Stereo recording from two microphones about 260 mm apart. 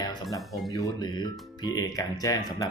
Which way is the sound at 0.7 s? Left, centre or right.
Centre.